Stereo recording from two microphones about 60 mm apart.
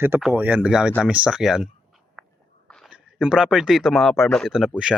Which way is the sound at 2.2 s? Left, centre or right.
Centre.